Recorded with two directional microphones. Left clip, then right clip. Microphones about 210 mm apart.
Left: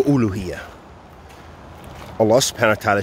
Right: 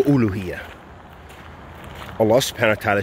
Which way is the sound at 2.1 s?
10° left (ahead or behind).